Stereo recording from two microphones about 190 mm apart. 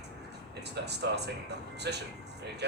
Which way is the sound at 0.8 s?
60° right (ahead or behind).